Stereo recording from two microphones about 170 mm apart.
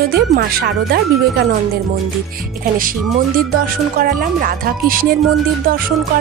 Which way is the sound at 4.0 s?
55° right (ahead or behind).